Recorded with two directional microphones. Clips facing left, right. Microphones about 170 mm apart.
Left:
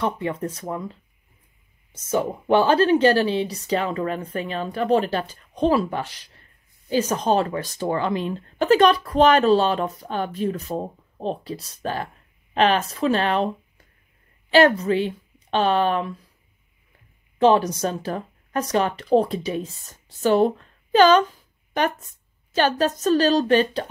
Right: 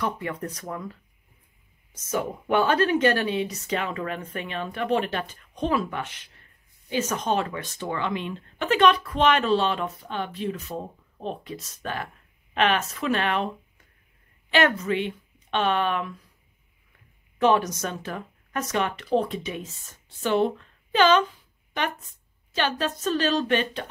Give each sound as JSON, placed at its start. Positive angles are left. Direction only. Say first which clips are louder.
{"t": 0.0, "sound": "speech", "louder": "left 4 dB", "side_deg": 25}
{"t": 2.0, "sound": "speech", "louder": "left 5 dB", "side_deg": 30}
{"t": 14.5, "sound": "speech", "louder": "left 6 dB", "side_deg": 35}
{"t": 17.4, "sound": "speech", "louder": "left 4 dB", "side_deg": 30}
{"t": 22.5, "sound": "speech", "louder": "left 6 dB", "side_deg": 40}